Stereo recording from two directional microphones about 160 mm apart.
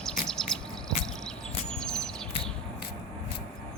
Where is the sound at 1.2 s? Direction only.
5° left (ahead or behind).